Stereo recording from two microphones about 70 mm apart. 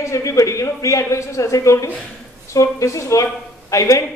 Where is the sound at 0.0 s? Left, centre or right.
Left.